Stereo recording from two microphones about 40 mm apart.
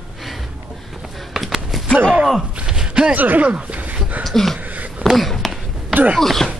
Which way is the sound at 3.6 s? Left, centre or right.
Right.